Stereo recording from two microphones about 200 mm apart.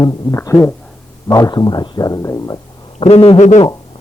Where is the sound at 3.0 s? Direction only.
30° left (ahead or behind).